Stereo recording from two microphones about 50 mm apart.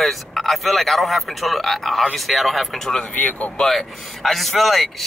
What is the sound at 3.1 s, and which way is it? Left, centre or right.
Speech, left.